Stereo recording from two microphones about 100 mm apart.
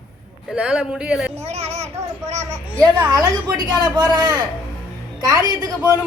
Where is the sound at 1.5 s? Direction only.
90° right.